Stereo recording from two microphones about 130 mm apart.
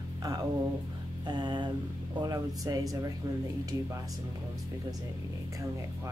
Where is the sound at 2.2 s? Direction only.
25° right (ahead or behind).